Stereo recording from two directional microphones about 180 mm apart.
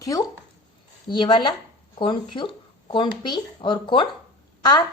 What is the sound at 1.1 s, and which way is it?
A woman's voice, 30° left (ahead or behind).